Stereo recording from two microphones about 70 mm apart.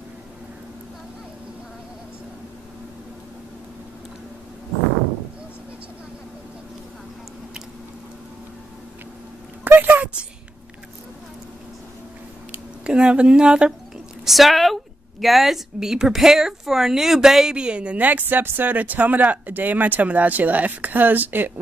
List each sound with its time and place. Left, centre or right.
9.7 s a sound: right
12.8 s speech: centre
14.2 s a woman's voice: centre; by 21.5 s right